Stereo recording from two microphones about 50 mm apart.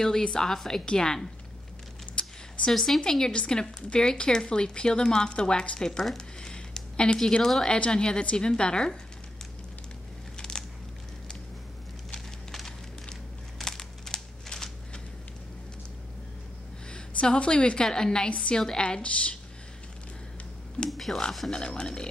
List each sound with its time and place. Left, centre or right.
0.0 s speech: centre
2.7 s a woman's voice: centre
7.4 s speech: centre
7.7 s a woman's voice: centre
10.3 s a sound: centre
12.1 s a sound: centre
16.9 s a woman's voice: left
20.9 s a woman's voice: centre
21.5 s speech: centre